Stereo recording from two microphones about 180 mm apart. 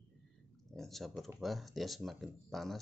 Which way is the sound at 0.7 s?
Centre (ahead or behind).